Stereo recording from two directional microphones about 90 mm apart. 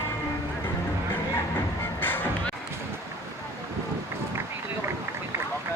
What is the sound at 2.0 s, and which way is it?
Music, 20° left (ahead or behind).